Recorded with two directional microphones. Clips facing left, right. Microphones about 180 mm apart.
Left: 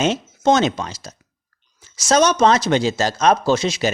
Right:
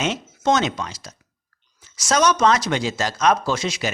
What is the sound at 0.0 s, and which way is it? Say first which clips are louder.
Speech: left 5 dB; 30° left (ahead or behind).